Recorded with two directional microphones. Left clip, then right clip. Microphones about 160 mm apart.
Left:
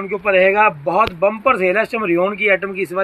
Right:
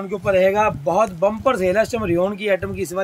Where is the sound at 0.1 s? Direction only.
35° right (ahead or behind).